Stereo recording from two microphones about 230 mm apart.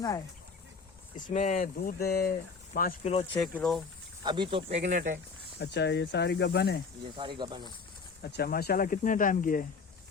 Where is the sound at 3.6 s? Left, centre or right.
Centre.